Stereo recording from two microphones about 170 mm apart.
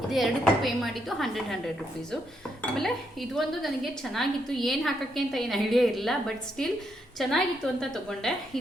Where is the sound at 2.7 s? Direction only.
Centre (ahead or behind).